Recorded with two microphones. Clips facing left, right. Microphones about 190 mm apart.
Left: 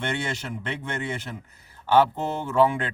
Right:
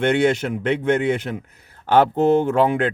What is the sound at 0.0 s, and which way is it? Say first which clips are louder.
Speech: right 12 dB; 60° right (ahead or behind).